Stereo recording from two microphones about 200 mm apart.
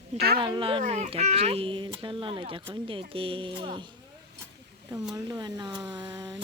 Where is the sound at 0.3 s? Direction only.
25° right (ahead or behind).